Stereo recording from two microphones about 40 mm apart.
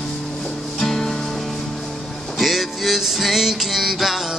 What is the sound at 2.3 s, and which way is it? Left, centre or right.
Music, centre.